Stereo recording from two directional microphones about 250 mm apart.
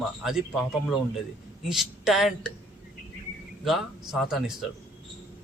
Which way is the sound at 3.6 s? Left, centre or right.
Centre.